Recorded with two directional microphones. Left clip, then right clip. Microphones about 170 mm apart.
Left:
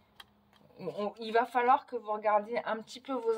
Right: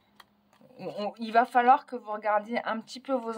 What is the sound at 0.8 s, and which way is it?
Speech, 40° right (ahead or behind).